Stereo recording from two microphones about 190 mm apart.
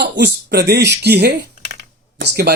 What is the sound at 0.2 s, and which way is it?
Speech, 60° right (ahead or behind).